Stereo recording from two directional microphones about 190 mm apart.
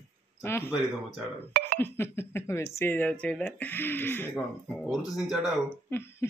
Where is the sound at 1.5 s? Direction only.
50° right (ahead or behind).